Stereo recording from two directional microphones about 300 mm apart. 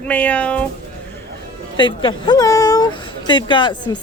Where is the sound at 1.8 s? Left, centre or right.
Centre.